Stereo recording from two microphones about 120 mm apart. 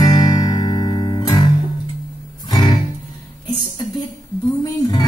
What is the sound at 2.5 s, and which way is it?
Music, 35° left (ahead or behind).